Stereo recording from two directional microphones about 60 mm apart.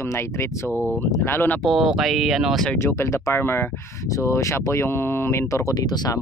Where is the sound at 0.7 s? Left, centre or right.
Left.